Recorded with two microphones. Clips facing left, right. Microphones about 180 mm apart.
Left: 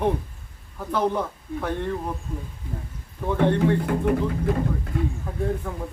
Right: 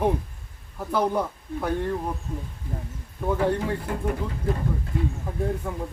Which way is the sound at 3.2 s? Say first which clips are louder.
Left 2 dB; 5° right (ahead or behind).